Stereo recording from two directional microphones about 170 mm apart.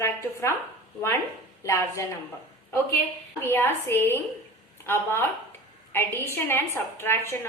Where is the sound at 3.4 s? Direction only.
15° left (ahead or behind).